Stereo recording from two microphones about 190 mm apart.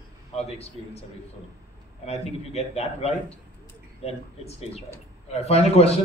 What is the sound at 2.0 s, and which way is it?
A man's voice, 35° left (ahead or behind).